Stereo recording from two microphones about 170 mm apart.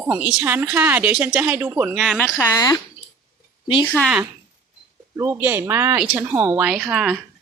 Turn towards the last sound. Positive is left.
turn(degrees=-5)  # may be behind; listen again after turning